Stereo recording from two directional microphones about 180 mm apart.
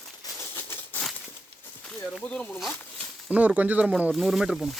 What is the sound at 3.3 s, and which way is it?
Speech, 10° right (ahead or behind).